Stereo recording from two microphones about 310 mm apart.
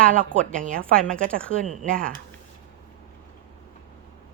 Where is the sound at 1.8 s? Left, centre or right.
Right.